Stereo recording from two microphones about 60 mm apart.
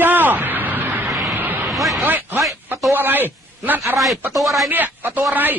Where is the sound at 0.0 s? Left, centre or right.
Right.